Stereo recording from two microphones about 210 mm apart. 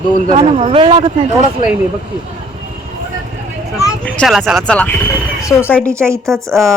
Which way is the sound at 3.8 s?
10° left (ahead or behind).